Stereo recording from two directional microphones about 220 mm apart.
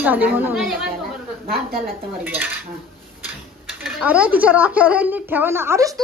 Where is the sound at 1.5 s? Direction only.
40° right (ahead or behind).